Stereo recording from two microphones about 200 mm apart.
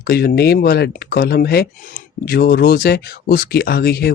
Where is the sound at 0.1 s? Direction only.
50° left (ahead or behind).